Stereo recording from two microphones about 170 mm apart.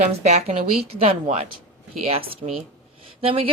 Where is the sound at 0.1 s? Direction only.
40° right (ahead or behind).